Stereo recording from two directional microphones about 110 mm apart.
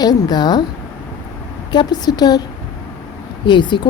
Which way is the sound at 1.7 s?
40° left (ahead or behind).